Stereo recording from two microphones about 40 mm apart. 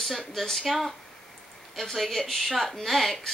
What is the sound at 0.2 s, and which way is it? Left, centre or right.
Speech, centre.